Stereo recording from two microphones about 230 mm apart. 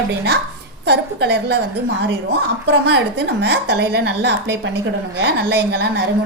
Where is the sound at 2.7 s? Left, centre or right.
Right.